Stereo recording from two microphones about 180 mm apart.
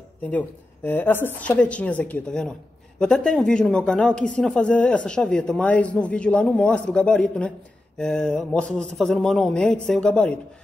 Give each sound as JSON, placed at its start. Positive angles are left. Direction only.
{"t": 0.2, "sound": "a woman's voice", "side_deg": 10}